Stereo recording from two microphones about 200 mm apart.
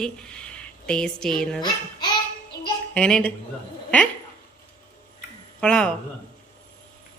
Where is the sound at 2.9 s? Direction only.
5° left (ahead or behind).